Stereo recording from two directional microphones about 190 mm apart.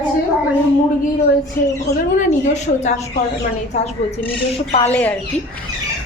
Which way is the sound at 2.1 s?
40° left (ahead or behind).